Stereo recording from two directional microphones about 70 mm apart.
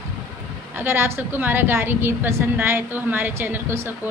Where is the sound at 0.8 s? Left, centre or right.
Right.